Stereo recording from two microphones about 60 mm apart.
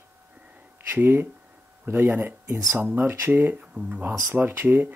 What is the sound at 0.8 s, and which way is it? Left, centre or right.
Speech, right.